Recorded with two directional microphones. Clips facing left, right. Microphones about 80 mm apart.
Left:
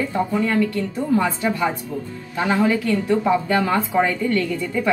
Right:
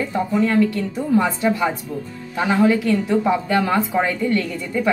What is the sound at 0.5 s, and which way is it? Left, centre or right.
A woman's voice, centre.